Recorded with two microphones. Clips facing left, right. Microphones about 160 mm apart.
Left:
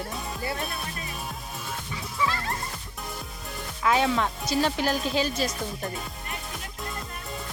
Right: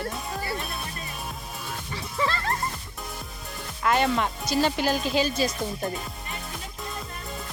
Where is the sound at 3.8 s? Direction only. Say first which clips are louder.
Even; centre (ahead or behind).